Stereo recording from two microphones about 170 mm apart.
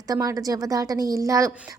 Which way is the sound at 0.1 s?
20° right (ahead or behind).